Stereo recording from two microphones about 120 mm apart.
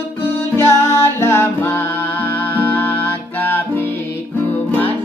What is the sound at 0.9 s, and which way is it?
Music, 20° left (ahead or behind).